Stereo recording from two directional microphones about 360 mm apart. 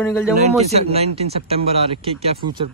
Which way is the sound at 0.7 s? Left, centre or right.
Centre.